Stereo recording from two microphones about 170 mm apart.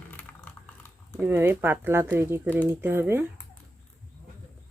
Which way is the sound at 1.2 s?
10° right (ahead or behind).